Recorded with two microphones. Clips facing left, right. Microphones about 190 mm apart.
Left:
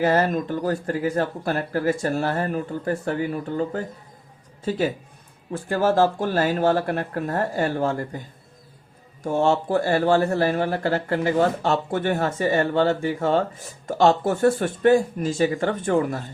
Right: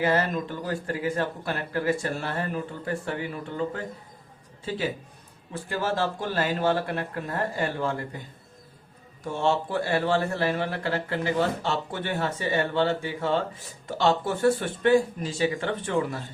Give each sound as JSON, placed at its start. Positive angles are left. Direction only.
{"t": 0.0, "sound": "a man's voice", "side_deg": 45}
{"t": 5.5, "sound": "a man's voice", "side_deg": 45}
{"t": 9.2, "sound": "a man's voice", "side_deg": 45}